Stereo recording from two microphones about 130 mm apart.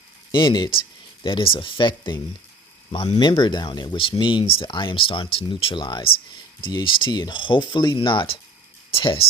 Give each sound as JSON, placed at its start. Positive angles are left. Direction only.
{"t": 0.3, "sound": "speech", "side_deg": 40}